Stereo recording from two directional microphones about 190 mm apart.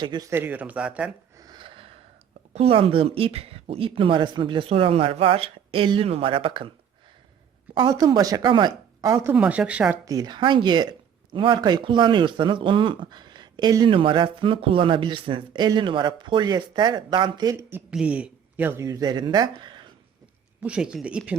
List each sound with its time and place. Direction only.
0.0 s speech: 20° right (ahead or behind); by 1.1 s 5° right (ahead or behind)
1.4 s a sound: 20° right (ahead or behind)
2.5 s speech: 30° right (ahead or behind)
7.7 s speech: 25° right (ahead or behind); by 10.0 s 5° right (ahead or behind)
10.1 s speech: 20° right (ahead or behind)
20.6 s speech: 5° right (ahead or behind)